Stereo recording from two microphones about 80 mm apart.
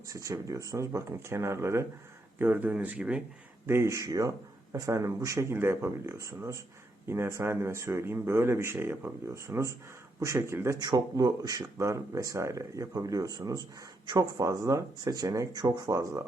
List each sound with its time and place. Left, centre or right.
0.1 s speech: right
2.4 s speech: right
3.7 s speech: right
10.8 s speech: right